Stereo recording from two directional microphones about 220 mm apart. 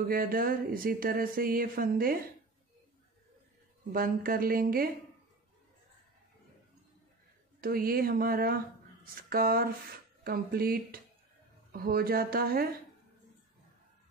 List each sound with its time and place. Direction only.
0.1 s speech: 40° right (ahead or behind)
3.9 s speech: 40° right (ahead or behind)
7.6 s speech: 40° right (ahead or behind)